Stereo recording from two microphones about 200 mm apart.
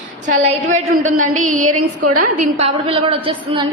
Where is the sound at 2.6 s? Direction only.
30° right (ahead or behind).